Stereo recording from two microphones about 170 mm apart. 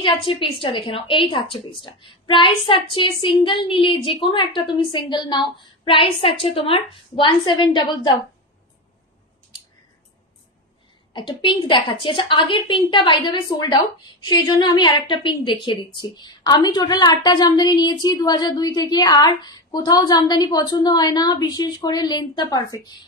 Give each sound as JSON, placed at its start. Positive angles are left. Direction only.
{"t": 0.0, "sound": "a woman's voice", "side_deg": 30}
{"t": 11.1, "sound": "a woman's voice", "side_deg": 30}